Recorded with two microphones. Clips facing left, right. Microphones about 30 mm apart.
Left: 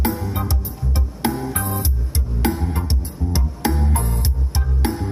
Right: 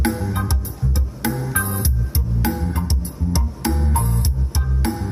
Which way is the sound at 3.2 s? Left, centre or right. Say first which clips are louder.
Right 2 dB; right.